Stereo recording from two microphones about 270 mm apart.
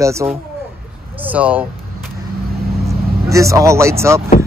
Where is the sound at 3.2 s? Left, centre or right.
Centre.